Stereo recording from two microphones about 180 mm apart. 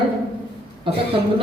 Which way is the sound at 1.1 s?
30° right (ahead or behind).